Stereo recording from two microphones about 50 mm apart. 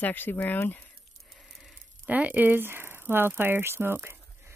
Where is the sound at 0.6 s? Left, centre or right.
Left.